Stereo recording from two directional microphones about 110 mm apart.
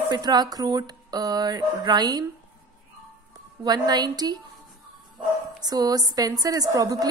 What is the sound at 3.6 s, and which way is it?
Speech, 40° right (ahead or behind).